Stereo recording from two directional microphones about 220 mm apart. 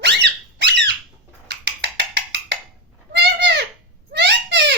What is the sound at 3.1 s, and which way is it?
Goat, 50° right (ahead or behind).